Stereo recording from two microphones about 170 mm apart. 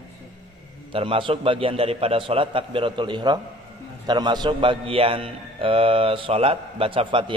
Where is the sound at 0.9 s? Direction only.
30° right (ahead or behind).